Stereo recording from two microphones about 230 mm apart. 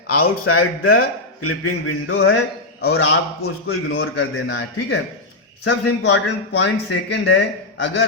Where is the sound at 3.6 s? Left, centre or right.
Left.